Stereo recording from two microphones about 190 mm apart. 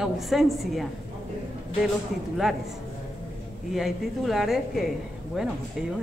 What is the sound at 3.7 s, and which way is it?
A woman's voice, centre (ahead or behind).